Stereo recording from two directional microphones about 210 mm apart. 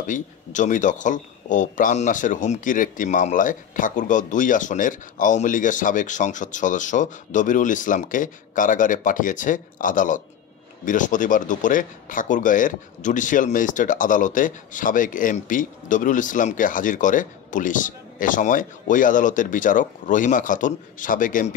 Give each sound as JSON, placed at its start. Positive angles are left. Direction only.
{"t": 0.0, "sound": "speech", "side_deg": 35}